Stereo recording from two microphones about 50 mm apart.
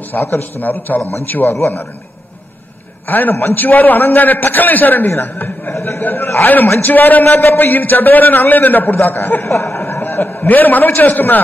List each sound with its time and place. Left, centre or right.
0.1 s a man's voice: left
3.1 s a man's voice: left
5.8 s a man's voice: left
6.0 s a man's voice: left
6.4 s a man's voice: left